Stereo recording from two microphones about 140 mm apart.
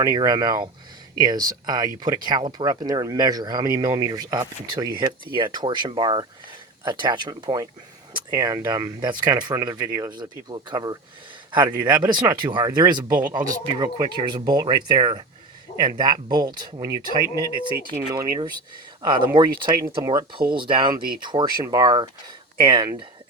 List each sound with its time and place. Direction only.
0.0 s speech: 25° right (ahead or behind)